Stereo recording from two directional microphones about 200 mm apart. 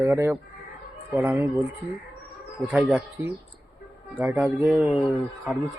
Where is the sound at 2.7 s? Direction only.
5° right (ahead or behind).